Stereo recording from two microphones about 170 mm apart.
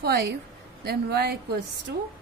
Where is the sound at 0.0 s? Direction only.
70° right (ahead or behind).